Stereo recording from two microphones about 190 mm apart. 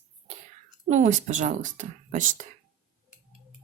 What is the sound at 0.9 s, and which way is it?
Speech, 40° right (ahead or behind).